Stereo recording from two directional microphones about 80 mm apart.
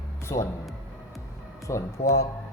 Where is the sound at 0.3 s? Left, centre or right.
Left.